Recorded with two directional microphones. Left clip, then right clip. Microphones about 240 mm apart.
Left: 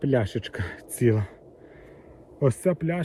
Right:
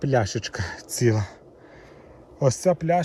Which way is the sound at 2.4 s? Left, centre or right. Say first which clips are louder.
Right 3 dB; centre.